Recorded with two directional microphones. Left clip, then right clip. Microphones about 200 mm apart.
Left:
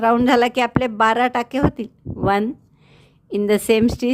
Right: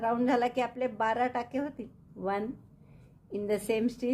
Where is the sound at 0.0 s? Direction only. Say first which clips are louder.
Left 12 dB; 45° left (ahead or behind).